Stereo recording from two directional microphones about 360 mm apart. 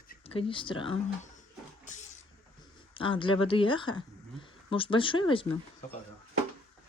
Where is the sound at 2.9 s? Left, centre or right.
Centre.